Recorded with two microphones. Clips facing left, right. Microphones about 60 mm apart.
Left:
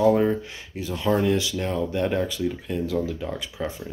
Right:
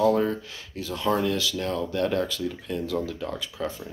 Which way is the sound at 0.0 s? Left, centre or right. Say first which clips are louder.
Left 3 dB; centre.